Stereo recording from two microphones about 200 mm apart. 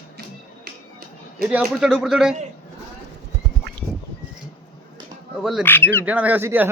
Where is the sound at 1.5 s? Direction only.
5° right (ahead or behind).